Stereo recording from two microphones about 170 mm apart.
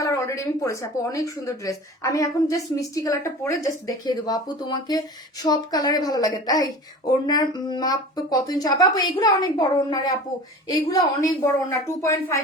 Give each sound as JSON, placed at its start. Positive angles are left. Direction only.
{"t": 0.0, "sound": "a woman's voice", "side_deg": 20}